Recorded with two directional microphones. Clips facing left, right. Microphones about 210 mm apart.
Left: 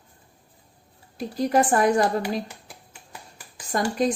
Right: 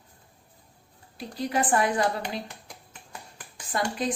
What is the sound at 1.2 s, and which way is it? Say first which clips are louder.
Speech: left 6 dB; 45° left (ahead or behind).